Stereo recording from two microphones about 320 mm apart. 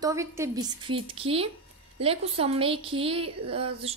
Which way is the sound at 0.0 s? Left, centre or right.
Centre.